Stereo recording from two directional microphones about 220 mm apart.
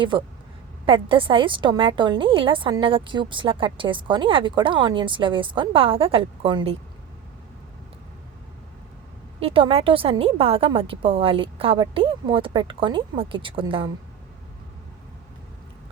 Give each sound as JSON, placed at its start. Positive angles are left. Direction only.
{"t": 0.1, "sound": "a woman's voice", "side_deg": -20}
{"t": 9.4, "sound": "a woman's voice", "side_deg": -25}